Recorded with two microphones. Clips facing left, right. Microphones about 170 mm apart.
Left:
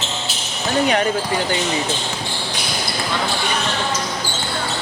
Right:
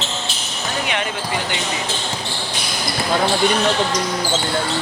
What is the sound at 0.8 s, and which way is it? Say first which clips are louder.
Speech: left 7 dB; 40° left (ahead or behind).